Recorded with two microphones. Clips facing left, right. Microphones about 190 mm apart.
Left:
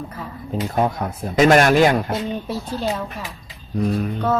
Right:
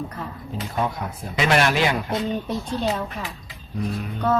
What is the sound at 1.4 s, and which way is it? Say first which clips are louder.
Speech: left 7 dB; 45° left (ahead or behind).